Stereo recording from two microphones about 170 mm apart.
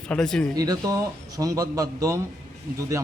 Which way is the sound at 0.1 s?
5° left (ahead or behind).